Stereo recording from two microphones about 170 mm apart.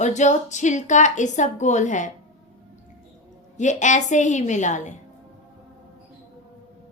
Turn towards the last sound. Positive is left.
turn(degrees=45)  # may be behind; listen again after turning